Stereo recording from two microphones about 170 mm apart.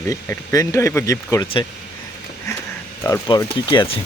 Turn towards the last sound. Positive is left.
turn(degrees=30)  # may be behind; listen again after turning